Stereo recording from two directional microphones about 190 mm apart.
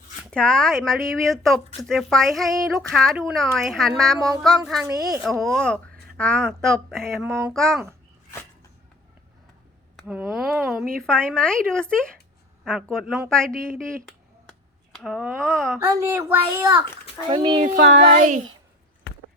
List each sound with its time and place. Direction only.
0.3 s speech: 5° left (ahead or behind)
2.4 s a child's voice: 15° right (ahead or behind)
2.8 s speech: centre (ahead or behind)
4.2 s a child's voice: 20° right (ahead or behind)
4.6 s speech: centre (ahead or behind)
4.9 s a child's voice: 20° right (ahead or behind)
5.2 s speech: centre (ahead or behind)
7.3 s a child's voice: 15° right (ahead or behind)
7.5 s speech: centre (ahead or behind)
10.1 s a woman's voice: 5° right (ahead or behind)
15.7 s a child's voice: 15° right (ahead or behind); by 18.3 s 40° right (ahead or behind)